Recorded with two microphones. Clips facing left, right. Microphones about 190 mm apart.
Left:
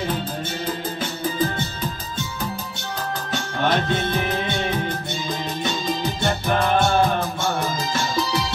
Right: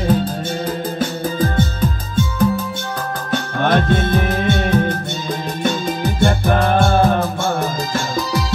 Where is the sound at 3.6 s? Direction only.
50° right (ahead or behind).